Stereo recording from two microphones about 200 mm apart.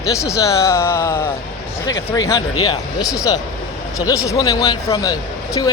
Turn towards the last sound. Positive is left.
turn(degrees=20)  # may be behind; listen again after turning